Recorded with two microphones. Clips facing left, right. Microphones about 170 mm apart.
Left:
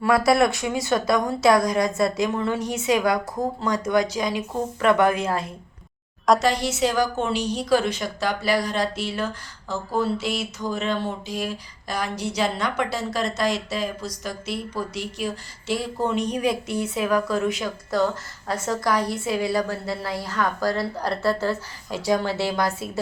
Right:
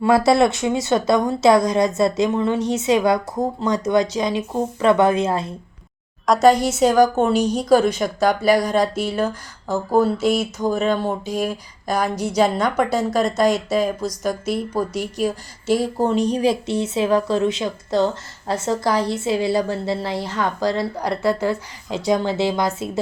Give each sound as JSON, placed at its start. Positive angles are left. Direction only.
{"t": 0.0, "sound": "a woman's voice", "side_deg": -25}
{"t": 6.4, "sound": "a woman's voice", "side_deg": -50}